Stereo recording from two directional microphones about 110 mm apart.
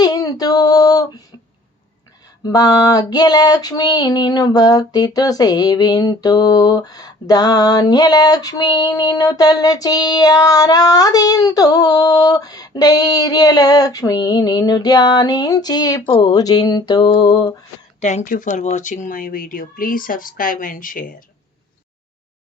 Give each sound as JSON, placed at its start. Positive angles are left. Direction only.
{"t": 0.0, "sound": "female singing", "side_deg": 35}
{"t": 2.4, "sound": "female singing", "side_deg": 35}
{"t": 18.0, "sound": "speech", "side_deg": 90}